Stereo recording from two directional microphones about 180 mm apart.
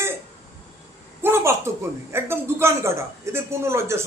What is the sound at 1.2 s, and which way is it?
Speech, 15° right (ahead or behind).